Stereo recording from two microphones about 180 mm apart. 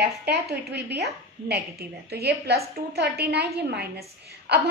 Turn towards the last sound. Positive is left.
turn(degrees=-65)  # may be behind; listen again after turning